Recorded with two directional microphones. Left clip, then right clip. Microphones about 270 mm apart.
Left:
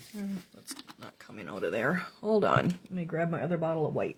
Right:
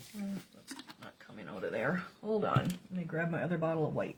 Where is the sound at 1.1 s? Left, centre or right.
Left.